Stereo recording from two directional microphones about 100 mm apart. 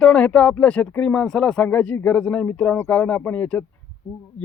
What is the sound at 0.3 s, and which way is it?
Speech, 15° left (ahead or behind).